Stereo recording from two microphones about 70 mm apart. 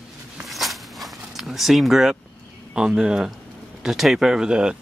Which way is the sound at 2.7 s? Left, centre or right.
Centre.